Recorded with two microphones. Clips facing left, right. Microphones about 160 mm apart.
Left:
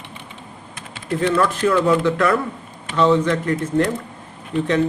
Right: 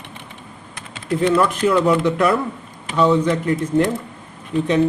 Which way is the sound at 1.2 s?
15° right (ahead or behind).